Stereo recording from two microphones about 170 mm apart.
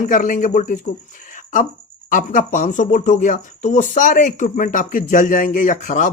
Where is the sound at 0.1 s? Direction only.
50° left (ahead or behind).